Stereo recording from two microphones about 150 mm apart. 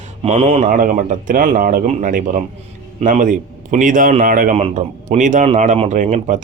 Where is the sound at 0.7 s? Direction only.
65° right (ahead or behind).